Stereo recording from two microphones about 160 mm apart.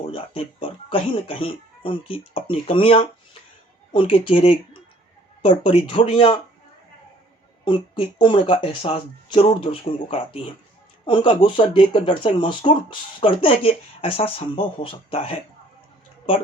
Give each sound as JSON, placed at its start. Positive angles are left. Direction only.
{"t": 0.1, "sound": "speech", "side_deg": 35}
{"t": 7.6, "sound": "speech", "side_deg": 30}